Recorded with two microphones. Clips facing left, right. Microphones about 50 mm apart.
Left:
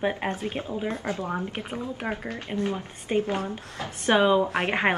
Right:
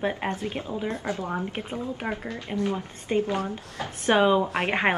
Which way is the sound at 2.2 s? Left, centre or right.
Left.